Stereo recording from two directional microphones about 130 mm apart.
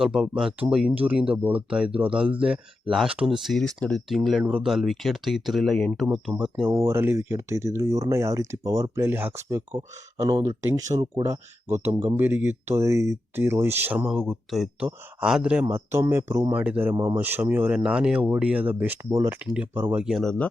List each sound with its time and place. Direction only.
0.0 s speech: 5° right (ahead or behind)
6.7 s speech: 20° right (ahead or behind)
15.6 s speech: 20° right (ahead or behind)
19.1 s speech: 20° right (ahead or behind)
19.4 s speech: 10° right (ahead or behind)